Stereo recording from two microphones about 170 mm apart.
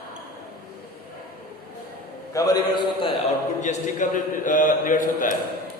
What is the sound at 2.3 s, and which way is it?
Speech, 20° left (ahead or behind).